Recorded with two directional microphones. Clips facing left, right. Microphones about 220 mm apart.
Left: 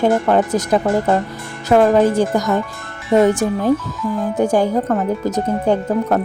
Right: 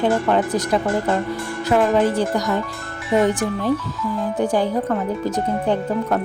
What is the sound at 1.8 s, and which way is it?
Speech, 45° left (ahead or behind).